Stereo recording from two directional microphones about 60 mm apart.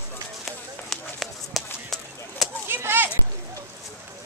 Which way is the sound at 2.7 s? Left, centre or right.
Right.